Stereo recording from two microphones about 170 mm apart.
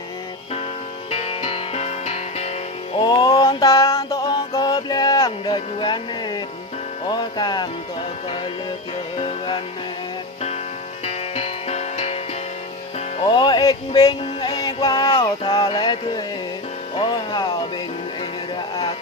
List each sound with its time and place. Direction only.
1.1 s music: 35° left (ahead or behind)
3.0 s music: 25° left (ahead or behind)
3.6 s a sound: 20° left (ahead or behind)
7.1 s music: 25° left (ahead or behind)
9.1 s music: 35° left (ahead or behind)
11.0 s music: 40° left (ahead or behind)
13.3 s music: 25° left (ahead or behind)